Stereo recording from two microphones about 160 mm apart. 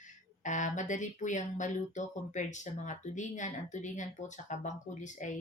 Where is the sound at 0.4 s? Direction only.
50° left (ahead or behind).